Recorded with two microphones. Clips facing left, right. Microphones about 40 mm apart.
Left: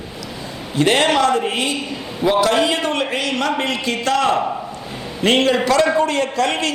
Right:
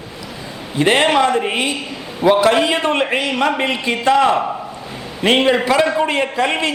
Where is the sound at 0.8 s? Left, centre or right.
Centre.